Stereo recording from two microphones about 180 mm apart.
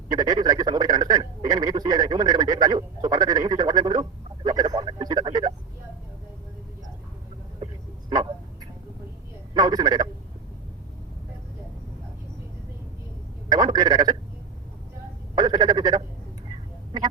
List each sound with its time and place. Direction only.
0.1 s radio: 25° right (ahead or behind)
9.6 s telephone: 20° right (ahead or behind)
13.5 s telephone: 20° right (ahead or behind)
15.4 s telephone: 25° right (ahead or behind)